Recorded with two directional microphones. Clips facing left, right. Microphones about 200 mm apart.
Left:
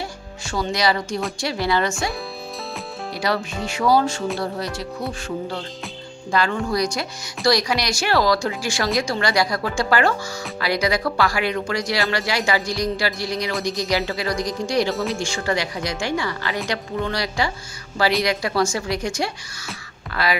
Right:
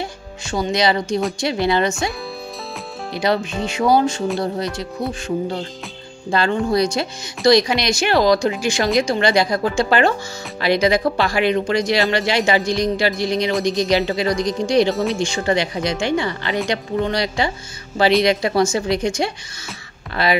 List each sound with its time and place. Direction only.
0.0 s music: 20° right (ahead or behind)
1.4 s speech: 20° right (ahead or behind)
3.2 s speech: 20° right (ahead or behind)
6.3 s speech: 25° right (ahead or behind)